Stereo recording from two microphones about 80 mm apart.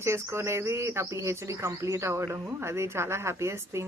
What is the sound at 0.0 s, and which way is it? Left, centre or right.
Speech, right.